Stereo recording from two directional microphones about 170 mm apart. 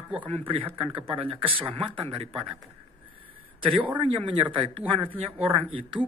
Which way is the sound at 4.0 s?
30° right (ahead or behind).